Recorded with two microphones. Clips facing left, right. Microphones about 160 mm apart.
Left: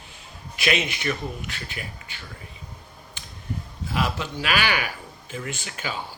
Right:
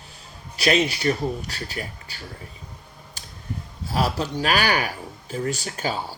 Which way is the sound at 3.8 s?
40° right (ahead or behind).